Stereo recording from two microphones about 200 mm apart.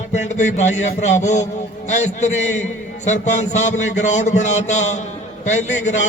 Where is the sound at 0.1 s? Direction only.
35° left (ahead or behind).